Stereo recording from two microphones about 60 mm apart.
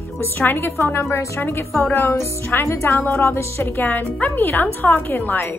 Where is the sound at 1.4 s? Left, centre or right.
Left.